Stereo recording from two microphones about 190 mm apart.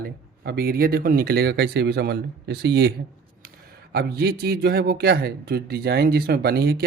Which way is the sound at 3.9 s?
55° right (ahead or behind).